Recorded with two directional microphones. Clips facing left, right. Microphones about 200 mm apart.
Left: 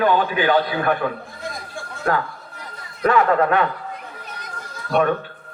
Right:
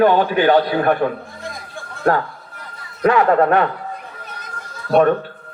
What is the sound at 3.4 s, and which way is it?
Speech, 40° right (ahead or behind).